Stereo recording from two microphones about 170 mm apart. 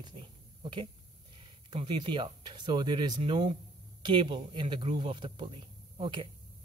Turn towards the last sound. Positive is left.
turn(degrees=-30)  # may be behind; listen again after turning